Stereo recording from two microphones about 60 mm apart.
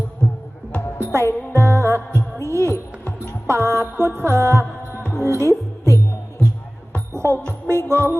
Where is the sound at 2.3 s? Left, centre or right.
Right.